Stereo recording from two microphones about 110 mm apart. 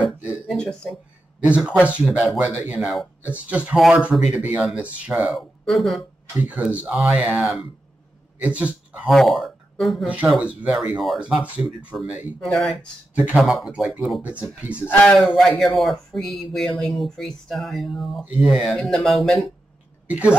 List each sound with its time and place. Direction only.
0.0 s a sound: 15° right (ahead or behind)
1.4 s speech: 10° right (ahead or behind)
5.7 s speech: centre (ahead or behind)
6.3 s speech: 15° right (ahead or behind)
9.1 s speech: centre (ahead or behind)
10.0 s speech: 10° right (ahead or behind)
12.4 s speech: 5° left (ahead or behind)
14.8 s speech: 15° left (ahead or behind)
15.1 s speech: centre (ahead or behind)
18.2 s speech: 10° right (ahead or behind)
18.8 s speech: 5° left (ahead or behind)
20.1 s speech: 15° right (ahead or behind)